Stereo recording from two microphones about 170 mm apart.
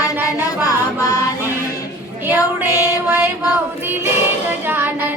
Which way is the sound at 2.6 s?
15° right (ahead or behind).